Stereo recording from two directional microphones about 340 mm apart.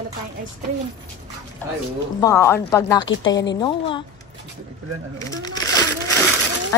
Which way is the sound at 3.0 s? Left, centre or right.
Left.